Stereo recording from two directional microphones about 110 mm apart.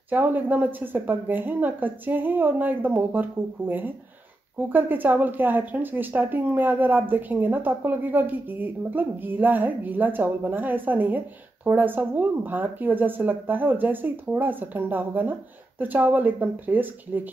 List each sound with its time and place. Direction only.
0.1 s speech: 15° right (ahead or behind)